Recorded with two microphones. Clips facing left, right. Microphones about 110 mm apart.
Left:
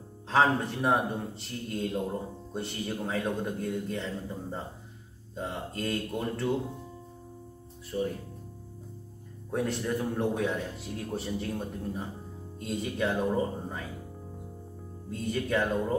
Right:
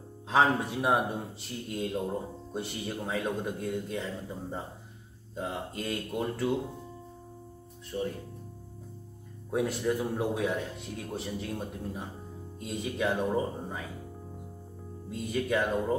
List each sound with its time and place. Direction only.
0.3 s speech: 5° right (ahead or behind)
7.9 s speech: centre (ahead or behind)
9.5 s speech: 5° right (ahead or behind)
15.0 s speech: 5° right (ahead or behind)